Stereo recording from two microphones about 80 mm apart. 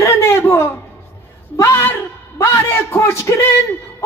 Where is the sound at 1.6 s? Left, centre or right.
Left.